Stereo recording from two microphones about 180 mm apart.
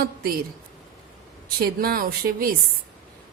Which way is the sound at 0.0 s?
55° right (ahead or behind).